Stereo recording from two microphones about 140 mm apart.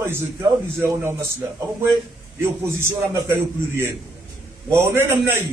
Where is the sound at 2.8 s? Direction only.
20° right (ahead or behind).